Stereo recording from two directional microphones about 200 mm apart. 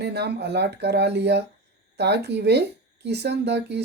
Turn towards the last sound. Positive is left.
turn(degrees=-55)  # may be behind; listen again after turning